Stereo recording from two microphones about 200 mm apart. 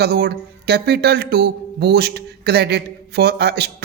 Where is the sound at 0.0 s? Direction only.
50° right (ahead or behind).